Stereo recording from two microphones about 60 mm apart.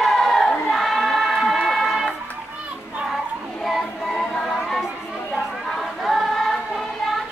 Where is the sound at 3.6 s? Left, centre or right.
Centre.